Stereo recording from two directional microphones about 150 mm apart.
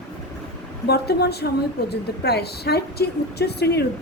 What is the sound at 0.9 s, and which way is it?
A woman's voice, 90° left.